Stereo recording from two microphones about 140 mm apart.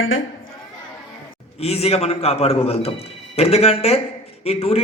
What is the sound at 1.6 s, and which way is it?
A man's voice, 45° left (ahead or behind).